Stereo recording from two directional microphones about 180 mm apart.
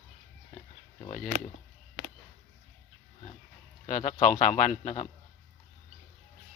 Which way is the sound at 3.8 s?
45° left (ahead or behind).